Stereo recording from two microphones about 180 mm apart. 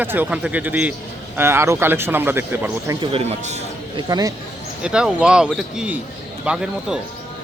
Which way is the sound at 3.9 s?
20° right (ahead or behind).